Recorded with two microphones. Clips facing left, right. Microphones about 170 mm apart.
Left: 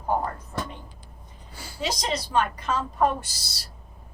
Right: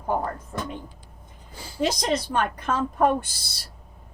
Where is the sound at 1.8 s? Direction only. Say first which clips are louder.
Right 5 dB; 55° right (ahead or behind).